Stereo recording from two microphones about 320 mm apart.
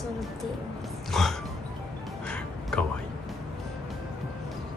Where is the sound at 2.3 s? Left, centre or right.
Centre.